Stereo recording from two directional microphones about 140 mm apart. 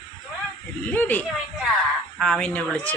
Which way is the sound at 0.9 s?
10° left (ahead or behind).